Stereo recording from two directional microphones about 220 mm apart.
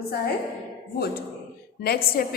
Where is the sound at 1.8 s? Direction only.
45° left (ahead or behind).